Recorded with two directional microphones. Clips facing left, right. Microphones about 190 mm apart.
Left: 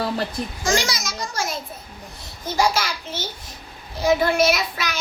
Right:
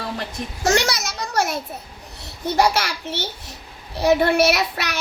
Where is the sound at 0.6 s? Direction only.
65° right (ahead or behind).